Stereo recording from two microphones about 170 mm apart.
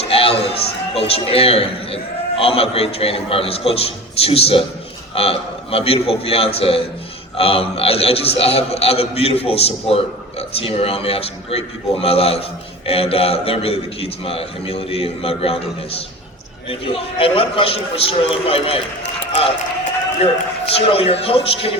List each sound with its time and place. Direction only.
0.0 s a sound: 35° left (ahead or behind)
0.5 s a man's voice: 35° left (ahead or behind)
20.7 s a man's voice: 35° left (ahead or behind)